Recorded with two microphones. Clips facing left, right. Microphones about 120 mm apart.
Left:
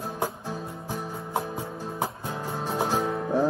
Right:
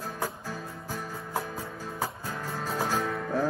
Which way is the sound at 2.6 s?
20° left (ahead or behind).